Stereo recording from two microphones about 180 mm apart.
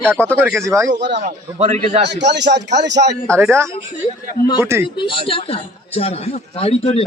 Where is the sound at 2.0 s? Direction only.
70° right (ahead or behind).